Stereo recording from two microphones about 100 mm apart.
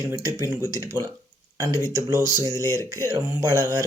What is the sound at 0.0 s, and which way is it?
Speech, 35° right (ahead or behind).